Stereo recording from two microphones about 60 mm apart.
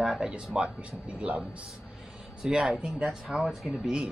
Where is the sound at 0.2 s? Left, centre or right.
Centre.